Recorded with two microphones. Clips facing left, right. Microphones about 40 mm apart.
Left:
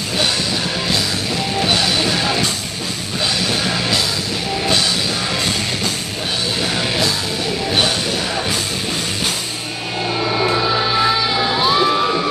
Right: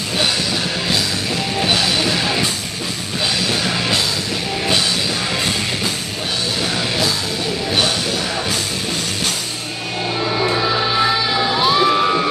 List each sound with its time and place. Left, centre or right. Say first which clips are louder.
1.6 s music: even; centre
3.4 s music: even; centre
10.2 s music: left 1 dB; centre
11.9 s crowd: right 1 dB; centre